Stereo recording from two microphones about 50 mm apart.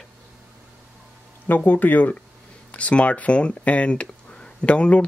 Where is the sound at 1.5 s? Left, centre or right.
Left.